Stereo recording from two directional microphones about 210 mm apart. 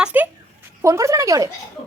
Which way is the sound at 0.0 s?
10° right (ahead or behind).